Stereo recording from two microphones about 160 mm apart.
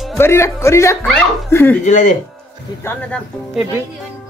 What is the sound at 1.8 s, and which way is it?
Speech, 50° left (ahead or behind).